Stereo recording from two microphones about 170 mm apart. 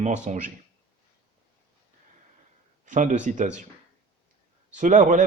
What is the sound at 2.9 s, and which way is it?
Speech, 45° right (ahead or behind).